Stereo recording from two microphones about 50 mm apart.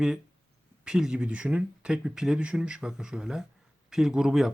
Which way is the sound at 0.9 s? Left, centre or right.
Centre.